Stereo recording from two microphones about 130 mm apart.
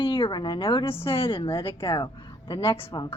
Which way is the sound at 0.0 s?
40° left (ahead or behind).